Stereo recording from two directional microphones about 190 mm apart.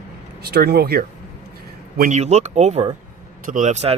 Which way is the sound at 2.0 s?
40° right (ahead or behind).